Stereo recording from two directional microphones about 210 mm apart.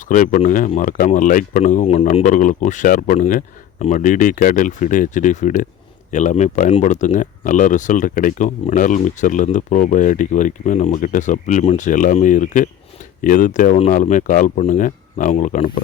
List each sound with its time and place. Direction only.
0.0 s speech: 40° left (ahead or behind)